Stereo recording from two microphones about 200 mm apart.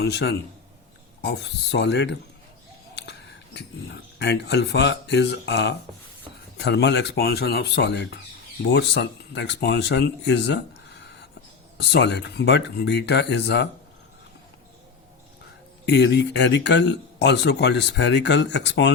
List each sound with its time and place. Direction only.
0.0 s speech: 55° left (ahead or behind)
11.8 s speech: 60° left (ahead or behind)
15.9 s speech: 60° left (ahead or behind)